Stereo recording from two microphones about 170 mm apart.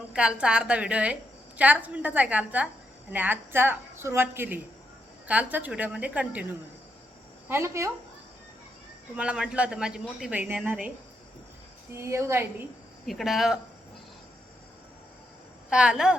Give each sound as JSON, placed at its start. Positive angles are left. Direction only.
{"t": 0.1, "sound": "a woman's voice", "side_deg": -5}
{"t": 9.1, "sound": "a woman's voice", "side_deg": -5}
{"t": 11.9, "sound": "a woman's voice", "side_deg": -15}
{"t": 13.1, "sound": "a woman's voice", "side_deg": 0}
{"t": 15.7, "sound": "a woman's voice", "side_deg": -5}